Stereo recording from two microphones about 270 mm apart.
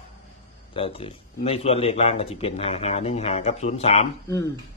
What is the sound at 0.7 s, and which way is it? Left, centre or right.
A man's voice, centre.